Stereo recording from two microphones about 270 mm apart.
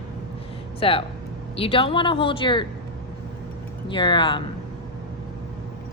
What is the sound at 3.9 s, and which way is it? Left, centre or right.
Speech, centre.